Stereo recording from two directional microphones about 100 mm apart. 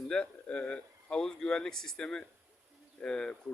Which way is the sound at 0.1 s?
10° left (ahead or behind).